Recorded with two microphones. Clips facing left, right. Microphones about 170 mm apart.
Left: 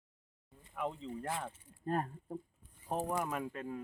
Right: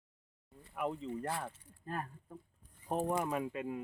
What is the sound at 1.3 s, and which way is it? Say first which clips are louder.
Speech: even; 20° left (ahead or behind).